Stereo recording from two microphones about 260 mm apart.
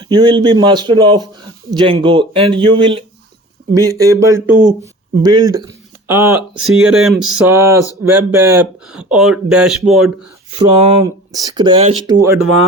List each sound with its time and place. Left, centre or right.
0.0 s speech: centre
10.5 s speech: right